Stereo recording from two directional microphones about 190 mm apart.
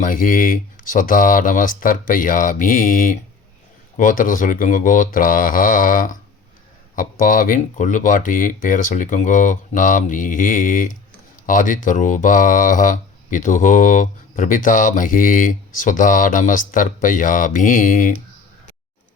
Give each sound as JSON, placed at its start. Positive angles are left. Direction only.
{"t": 0.0, "sound": "speech", "side_deg": 45}